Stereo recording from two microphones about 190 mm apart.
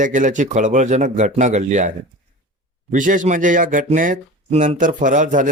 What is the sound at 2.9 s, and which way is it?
Speech, 45° right (ahead or behind).